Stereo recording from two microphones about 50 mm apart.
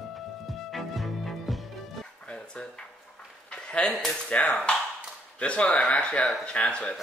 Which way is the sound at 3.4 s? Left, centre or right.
Left.